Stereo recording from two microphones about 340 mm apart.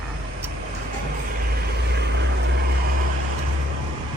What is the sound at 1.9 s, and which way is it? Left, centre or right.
Vehicle, right.